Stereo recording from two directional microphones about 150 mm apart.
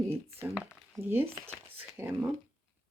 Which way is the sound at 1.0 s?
15° right (ahead or behind).